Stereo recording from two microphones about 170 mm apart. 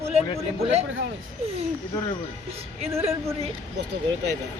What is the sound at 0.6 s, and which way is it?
Speech, 40° right (ahead or behind).